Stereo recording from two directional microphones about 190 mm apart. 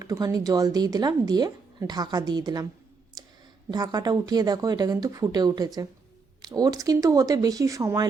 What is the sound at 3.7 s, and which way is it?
A woman's voice, 20° right (ahead or behind).